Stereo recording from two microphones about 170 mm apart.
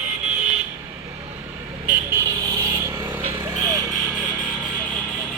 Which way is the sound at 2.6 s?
15° right (ahead or behind).